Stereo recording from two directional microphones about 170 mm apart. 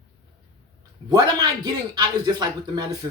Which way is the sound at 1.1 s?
20° right (ahead or behind).